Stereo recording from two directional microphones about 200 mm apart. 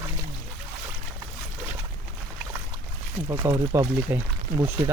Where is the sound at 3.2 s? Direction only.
20° right (ahead or behind).